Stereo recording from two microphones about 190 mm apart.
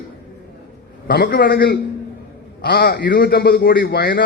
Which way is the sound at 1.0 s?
50° left (ahead or behind).